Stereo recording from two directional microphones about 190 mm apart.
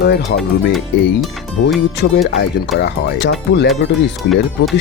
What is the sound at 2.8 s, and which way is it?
Speech, 65° left (ahead or behind).